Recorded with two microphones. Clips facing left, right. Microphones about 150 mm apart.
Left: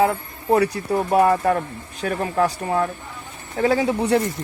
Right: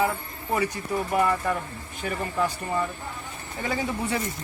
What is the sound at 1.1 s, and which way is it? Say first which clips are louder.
Speech: left 7 dB; 65° left (ahead or behind).